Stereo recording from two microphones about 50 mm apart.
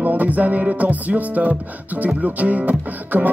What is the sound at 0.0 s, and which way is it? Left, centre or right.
Music, right.